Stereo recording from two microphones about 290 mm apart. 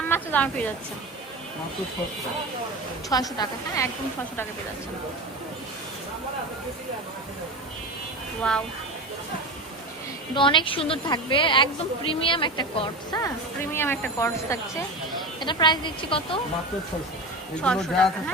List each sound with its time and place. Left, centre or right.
0.1 s a sound: centre
3.1 s a woman's voice: centre
8.4 s speech: centre
10.3 s a woman's voice: centre
17.6 s speech: centre